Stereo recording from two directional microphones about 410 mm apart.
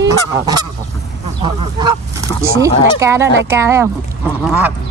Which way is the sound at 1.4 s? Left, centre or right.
Centre.